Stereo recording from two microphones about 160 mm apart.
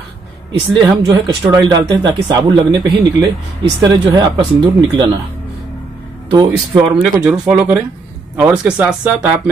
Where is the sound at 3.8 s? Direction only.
25° right (ahead or behind).